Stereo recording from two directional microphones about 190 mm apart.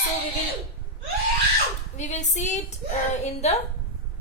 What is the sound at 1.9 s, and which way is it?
Speech, 40° left (ahead or behind).